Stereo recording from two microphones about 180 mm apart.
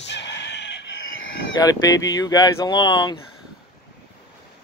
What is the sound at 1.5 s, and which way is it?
Speech, 20° left (ahead or behind).